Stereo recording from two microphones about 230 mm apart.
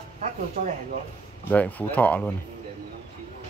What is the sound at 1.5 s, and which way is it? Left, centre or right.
Speech, centre.